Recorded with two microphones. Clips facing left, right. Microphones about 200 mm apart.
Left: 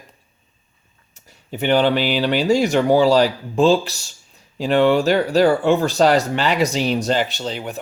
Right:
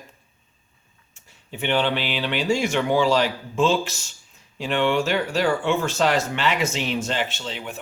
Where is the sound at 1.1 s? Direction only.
40° left (ahead or behind).